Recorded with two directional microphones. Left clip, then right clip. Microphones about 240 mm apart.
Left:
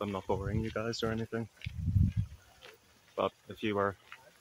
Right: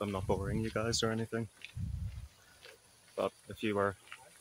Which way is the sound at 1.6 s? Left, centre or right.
Left.